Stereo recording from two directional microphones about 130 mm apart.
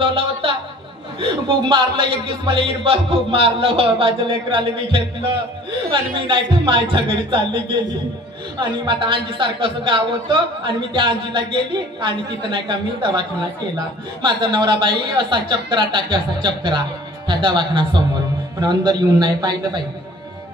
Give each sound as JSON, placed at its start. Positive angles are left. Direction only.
{"t": 0.0, "sound": "a sound", "side_deg": -45}
{"t": 1.2, "sound": "a man's voice", "side_deg": -40}
{"t": 6.1, "sound": "speech", "side_deg": -40}
{"t": 8.5, "sound": "speech", "side_deg": -40}